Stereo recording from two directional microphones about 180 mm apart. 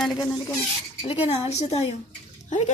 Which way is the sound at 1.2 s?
35° left (ahead or behind).